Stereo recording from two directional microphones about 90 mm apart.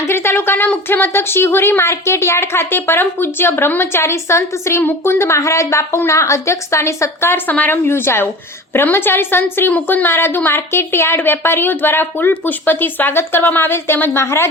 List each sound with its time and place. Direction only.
0.0 s a woman's voice: 25° left (ahead or behind)